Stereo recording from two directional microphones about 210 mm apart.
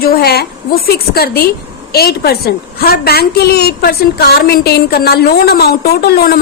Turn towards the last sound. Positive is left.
turn(degrees=45)  # may be behind; listen again after turning